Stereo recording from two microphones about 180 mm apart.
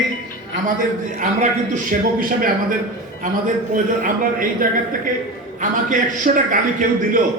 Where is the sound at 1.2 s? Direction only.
45° right (ahead or behind).